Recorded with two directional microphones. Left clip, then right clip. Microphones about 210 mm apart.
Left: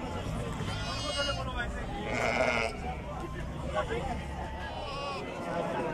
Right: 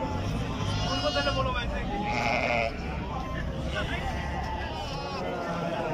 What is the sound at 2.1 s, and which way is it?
Sheep, 40° left (ahead or behind).